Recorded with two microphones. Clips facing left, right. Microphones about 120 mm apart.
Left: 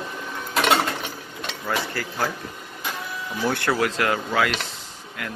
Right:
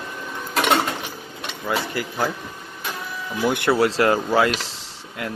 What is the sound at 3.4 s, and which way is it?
Speech, 15° right (ahead or behind).